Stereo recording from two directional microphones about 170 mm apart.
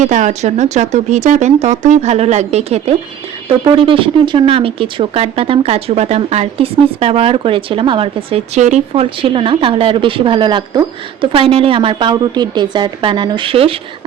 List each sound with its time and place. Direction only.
0.0 s speech: 45° right (ahead or behind)